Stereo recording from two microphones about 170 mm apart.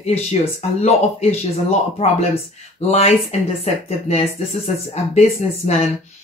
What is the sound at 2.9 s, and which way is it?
Speech, 40° left (ahead or behind).